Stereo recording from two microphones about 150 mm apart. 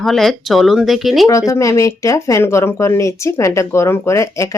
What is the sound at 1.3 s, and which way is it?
Speech, 20° left (ahead or behind).